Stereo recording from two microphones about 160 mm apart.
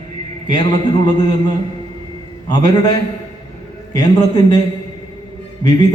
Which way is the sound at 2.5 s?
25° left (ahead or behind).